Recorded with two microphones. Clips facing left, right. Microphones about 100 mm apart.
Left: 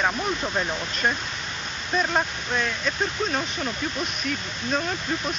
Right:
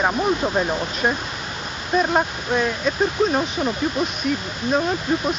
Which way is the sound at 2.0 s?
20° right (ahead or behind).